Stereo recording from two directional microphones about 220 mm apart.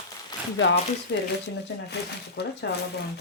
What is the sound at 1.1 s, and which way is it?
Speech, 55° left (ahead or behind).